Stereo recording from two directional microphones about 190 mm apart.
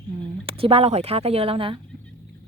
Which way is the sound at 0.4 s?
30° right (ahead or behind).